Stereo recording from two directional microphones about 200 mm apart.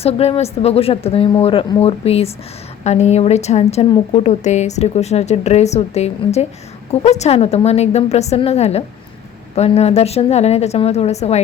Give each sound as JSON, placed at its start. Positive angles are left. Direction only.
{"t": 0.0, "sound": "a woman's voice", "side_deg": 30}